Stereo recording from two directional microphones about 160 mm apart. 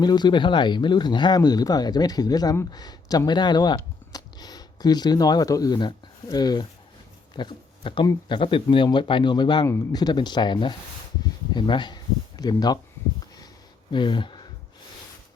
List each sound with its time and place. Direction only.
0.0 s speech: 25° left (ahead or behind)
13.9 s speech: 30° left (ahead or behind)